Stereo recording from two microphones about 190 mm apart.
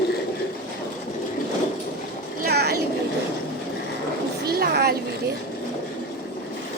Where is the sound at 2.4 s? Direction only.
55° right (ahead or behind).